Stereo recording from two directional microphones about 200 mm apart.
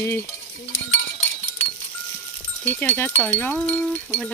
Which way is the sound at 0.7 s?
75° left (ahead or behind).